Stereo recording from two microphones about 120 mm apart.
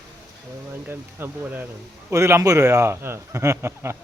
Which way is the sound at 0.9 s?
15° right (ahead or behind).